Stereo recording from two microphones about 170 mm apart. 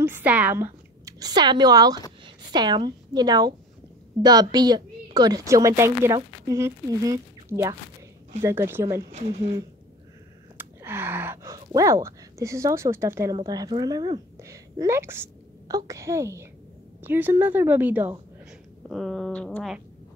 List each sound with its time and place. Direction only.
0.0 s a woman's voice: 10° right (ahead or behind)
10.6 s a woman's voice: 15° right (ahead or behind)
18.9 s a sound: centre (ahead or behind)